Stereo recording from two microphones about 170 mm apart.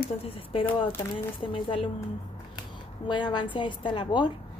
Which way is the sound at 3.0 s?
25° left (ahead or behind).